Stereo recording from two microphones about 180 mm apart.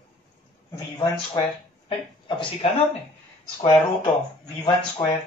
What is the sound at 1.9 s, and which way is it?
Speech, 30° left (ahead or behind).